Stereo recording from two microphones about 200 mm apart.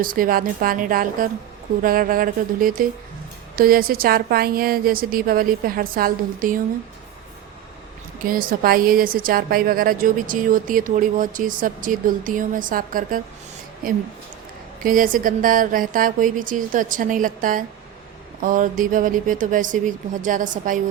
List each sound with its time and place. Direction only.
0.0 s a woman's voice: 45° right (ahead or behind)
8.2 s a woman's voice: 45° right (ahead or behind)